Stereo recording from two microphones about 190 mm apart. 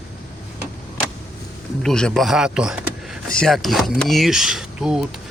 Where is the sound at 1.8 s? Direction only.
5° left (ahead or behind).